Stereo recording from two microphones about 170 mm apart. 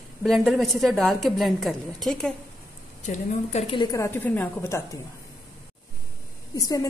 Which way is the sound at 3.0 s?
45° left (ahead or behind).